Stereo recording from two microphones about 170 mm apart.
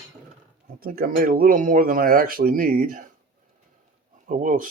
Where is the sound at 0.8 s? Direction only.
60° right (ahead or behind).